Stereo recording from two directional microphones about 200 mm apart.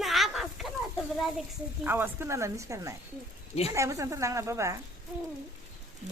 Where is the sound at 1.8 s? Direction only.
10° right (ahead or behind).